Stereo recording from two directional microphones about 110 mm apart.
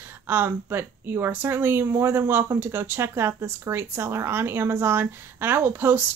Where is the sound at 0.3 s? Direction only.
20° right (ahead or behind).